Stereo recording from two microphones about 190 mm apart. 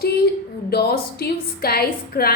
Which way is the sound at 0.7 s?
55° left (ahead or behind).